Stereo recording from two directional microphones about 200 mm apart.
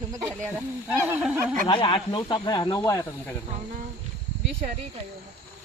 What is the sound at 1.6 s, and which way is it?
Speech, 25° left (ahead or behind).